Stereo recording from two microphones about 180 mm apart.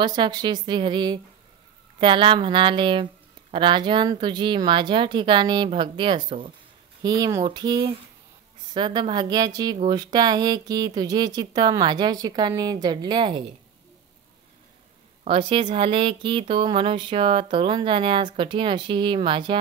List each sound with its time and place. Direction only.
0.0 s speech: 25° right (ahead or behind)
15.2 s speech: 30° right (ahead or behind)